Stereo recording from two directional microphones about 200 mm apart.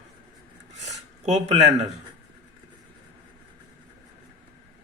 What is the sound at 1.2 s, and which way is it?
Speech, 35° right (ahead or behind).